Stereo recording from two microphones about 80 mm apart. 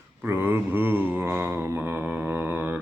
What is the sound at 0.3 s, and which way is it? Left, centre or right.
Mantra, right.